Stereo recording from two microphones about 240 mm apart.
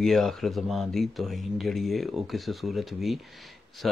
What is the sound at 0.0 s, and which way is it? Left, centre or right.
Speech, centre.